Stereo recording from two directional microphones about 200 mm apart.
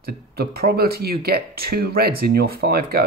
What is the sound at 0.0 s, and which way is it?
Speech, 50° right (ahead or behind).